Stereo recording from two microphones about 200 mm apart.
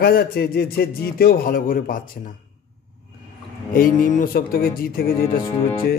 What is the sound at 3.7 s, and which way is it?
Speech, 45° left (ahead or behind).